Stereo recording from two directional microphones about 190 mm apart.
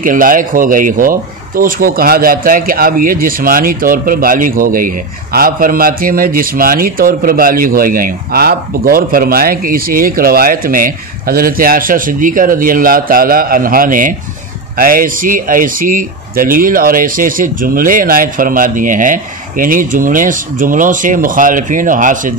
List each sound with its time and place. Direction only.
0.0 s a man's voice: 45° right (ahead or behind)